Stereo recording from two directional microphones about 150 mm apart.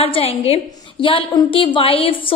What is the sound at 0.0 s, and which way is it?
A woman's voice, 40° left (ahead or behind).